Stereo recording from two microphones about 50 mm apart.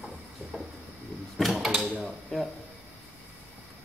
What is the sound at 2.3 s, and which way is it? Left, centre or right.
Speech, centre.